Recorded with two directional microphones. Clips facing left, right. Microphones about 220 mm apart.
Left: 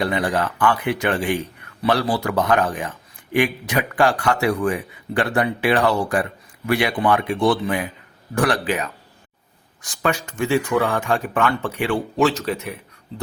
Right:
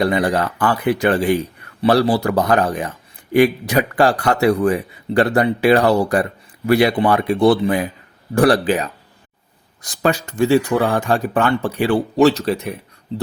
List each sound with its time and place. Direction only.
0.0 s a man's voice: 40° right (ahead or behind)